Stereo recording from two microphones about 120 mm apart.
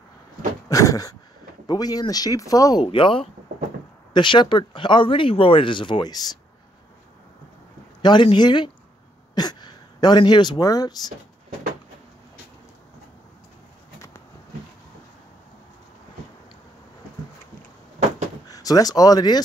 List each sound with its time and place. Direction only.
0.7 s dog: 30° left (ahead or behind)
1.7 s speech: 35° left (ahead or behind)
8.0 s speech: 40° left (ahead or behind)
18.5 s speech: 30° left (ahead or behind)